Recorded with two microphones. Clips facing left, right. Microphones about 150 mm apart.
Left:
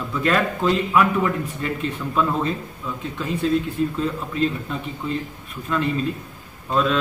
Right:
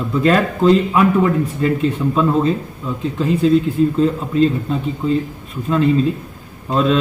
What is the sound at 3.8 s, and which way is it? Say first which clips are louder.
Speech: right 7 dB; 30° right (ahead or behind).